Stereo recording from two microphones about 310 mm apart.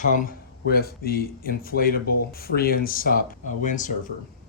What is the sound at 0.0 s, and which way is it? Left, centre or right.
Speech, left.